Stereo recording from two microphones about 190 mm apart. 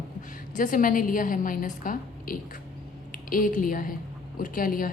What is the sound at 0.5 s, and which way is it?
A woman's voice, 45° left (ahead or behind).